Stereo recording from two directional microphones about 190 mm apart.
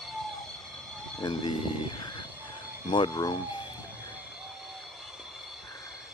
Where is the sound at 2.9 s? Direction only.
25° left (ahead or behind).